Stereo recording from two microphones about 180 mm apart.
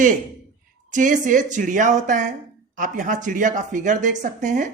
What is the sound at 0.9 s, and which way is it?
Speech, 45° right (ahead or behind).